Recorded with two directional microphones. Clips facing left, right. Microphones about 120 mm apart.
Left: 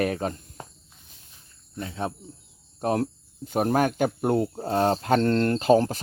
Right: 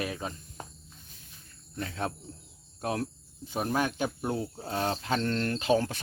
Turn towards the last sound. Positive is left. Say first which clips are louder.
# left 7 dB
turn(degrees=40)  # may be behind; listen again after turning